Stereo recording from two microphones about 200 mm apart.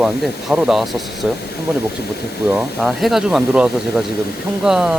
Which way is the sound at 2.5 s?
Centre (ahead or behind).